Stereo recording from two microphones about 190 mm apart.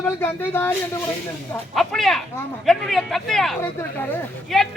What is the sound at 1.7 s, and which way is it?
A man's voice, centre (ahead or behind).